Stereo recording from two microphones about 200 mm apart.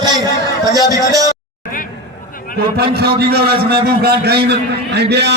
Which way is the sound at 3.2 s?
55° right (ahead or behind).